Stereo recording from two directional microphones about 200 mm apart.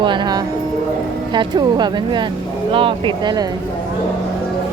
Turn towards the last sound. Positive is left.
turn(degrees=-20)  # may be behind; listen again after turning